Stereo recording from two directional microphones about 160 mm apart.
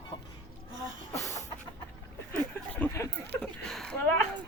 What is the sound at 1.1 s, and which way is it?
Vehicle, 20° left (ahead or behind).